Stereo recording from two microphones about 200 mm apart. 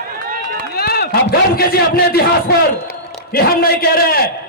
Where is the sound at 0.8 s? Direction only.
50° left (ahead or behind).